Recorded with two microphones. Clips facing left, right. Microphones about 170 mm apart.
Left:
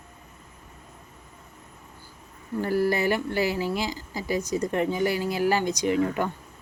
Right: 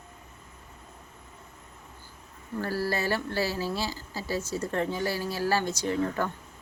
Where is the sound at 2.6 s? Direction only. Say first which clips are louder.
Left 6 dB; 20° left (ahead or behind).